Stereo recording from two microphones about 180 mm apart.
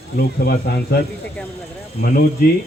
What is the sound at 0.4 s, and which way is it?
Speech, 60° left (ahead or behind).